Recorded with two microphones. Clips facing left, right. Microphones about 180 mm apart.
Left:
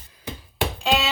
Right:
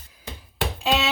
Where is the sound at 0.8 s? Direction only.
Centre (ahead or behind).